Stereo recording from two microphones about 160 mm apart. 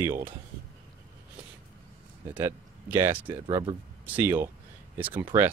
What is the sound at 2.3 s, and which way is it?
Speech, 10° right (ahead or behind).